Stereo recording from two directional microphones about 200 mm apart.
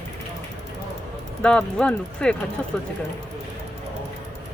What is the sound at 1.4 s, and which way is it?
Speech, 5° left (ahead or behind).